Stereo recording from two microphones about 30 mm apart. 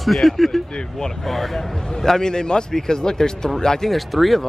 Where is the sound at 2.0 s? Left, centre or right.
Centre.